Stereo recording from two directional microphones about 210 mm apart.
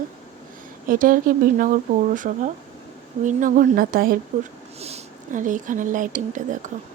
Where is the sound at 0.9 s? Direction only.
40° right (ahead or behind).